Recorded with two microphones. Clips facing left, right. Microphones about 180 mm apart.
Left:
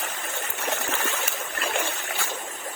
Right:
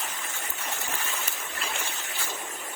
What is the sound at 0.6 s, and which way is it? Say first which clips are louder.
Trickle: left 7 dB; 75° left (ahead or behind).